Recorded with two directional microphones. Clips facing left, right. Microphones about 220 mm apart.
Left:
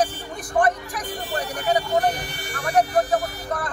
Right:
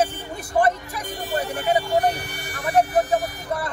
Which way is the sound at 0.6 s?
25° right (ahead or behind).